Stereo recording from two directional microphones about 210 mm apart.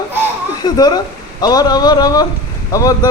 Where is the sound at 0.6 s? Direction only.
20° left (ahead or behind).